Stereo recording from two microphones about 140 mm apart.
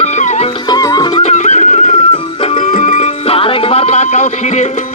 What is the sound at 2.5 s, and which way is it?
Music, 70° left (ahead or behind).